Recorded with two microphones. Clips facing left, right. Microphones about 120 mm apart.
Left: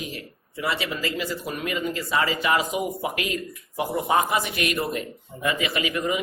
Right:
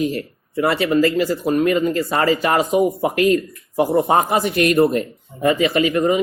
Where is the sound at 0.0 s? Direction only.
55° right (ahead or behind).